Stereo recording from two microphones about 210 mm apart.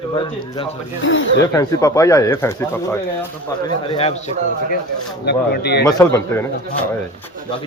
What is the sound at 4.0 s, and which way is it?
Speech, 30° left (ahead or behind).